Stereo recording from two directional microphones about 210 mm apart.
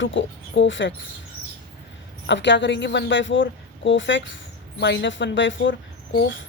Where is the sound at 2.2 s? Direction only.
60° left (ahead or behind).